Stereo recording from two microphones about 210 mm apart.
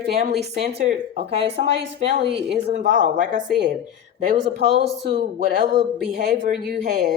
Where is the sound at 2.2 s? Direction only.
55° right (ahead or behind).